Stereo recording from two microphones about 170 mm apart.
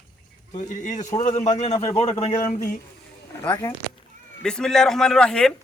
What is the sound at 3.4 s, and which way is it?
A man's voice, 15° left (ahead or behind).